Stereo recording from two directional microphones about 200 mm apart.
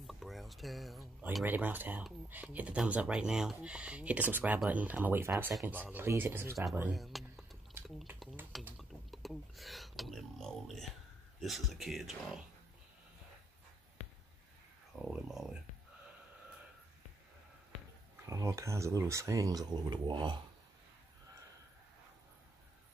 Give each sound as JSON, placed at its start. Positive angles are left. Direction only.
{"t": 0.0, "sound": "speech", "side_deg": 0}
{"t": 6.9, "sound": "speech", "side_deg": 0}
{"t": 15.0, "sound": "speech", "side_deg": 0}
{"t": 18.2, "sound": "speech", "side_deg": -15}